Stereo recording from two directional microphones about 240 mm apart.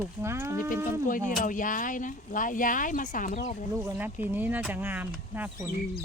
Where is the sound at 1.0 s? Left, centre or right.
Left.